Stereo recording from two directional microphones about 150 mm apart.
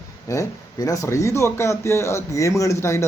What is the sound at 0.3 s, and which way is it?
Speech, 20° left (ahead or behind).